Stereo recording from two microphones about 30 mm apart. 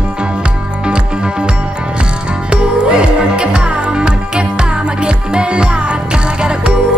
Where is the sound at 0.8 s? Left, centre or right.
Right.